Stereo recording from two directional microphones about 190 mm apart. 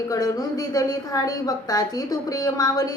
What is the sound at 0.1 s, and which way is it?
A woman's voice, 20° left (ahead or behind).